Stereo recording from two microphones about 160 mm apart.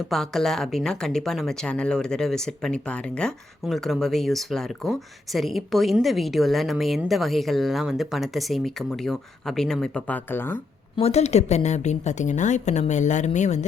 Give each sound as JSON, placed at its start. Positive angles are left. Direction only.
{"t": 0.1, "sound": "speech", "side_deg": 0}
{"t": 10.9, "sound": "a woman's voice", "side_deg": 40}